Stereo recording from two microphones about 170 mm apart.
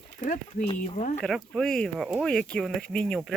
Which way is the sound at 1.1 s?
5° left (ahead or behind).